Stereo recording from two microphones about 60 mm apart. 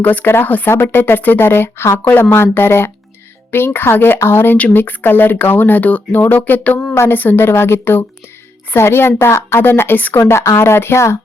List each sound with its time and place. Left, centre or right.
0.0 s speech: left
10.2 s speech: left